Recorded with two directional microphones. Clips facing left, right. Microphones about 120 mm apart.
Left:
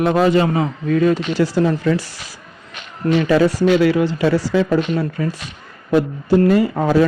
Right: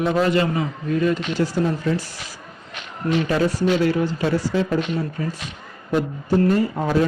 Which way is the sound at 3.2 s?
90° left.